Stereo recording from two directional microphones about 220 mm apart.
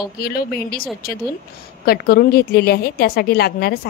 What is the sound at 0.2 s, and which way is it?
A woman's voice, 45° left (ahead or behind).